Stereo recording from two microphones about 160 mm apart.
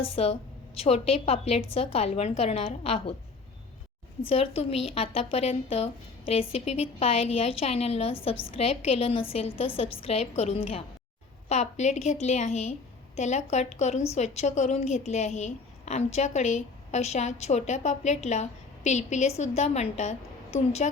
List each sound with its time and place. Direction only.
0.0 s a woman's voice: 40° left (ahead or behind)
4.3 s a woman's voice: 35° left (ahead or behind)